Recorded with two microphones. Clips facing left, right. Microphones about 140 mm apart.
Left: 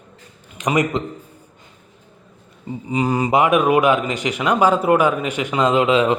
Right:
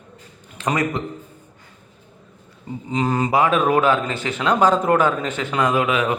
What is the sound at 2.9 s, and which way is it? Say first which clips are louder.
A man's voice: left 2 dB; 10° left (ahead or behind).